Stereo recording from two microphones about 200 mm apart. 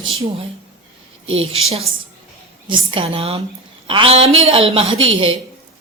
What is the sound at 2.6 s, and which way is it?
A woman's voice, 25° right (ahead or behind).